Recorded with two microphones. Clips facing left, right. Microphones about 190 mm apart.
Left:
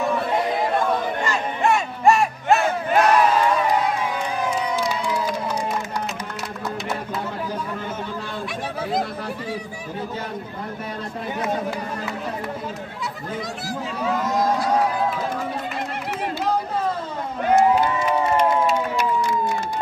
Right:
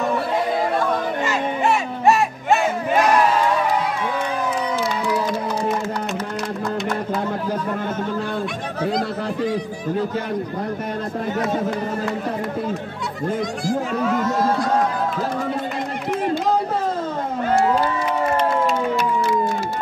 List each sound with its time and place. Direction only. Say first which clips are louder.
1.2 s battle cry: right 1 dB; 5° right (ahead or behind)
14.2 s a sound: right 1 dB; 10° left (ahead or behind)
17.5 s crowd: left 2 dB; 15° left (ahead or behind)